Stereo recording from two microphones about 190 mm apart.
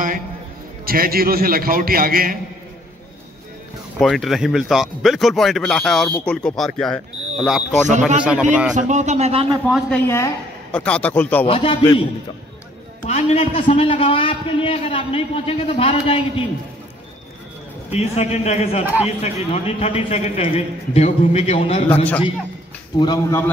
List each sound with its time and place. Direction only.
0.8 s a man's voice: 50° right (ahead or behind)
4.0 s speech: centre (ahead or behind)
8.7 s speech: 40° right (ahead or behind)
10.0 s a woman's voice: 15° left (ahead or behind)
11.4 s a man's voice: 30° left (ahead or behind)
17.9 s a man's voice: 35° left (ahead or behind)
22.9 s a man's voice: 25° left (ahead or behind)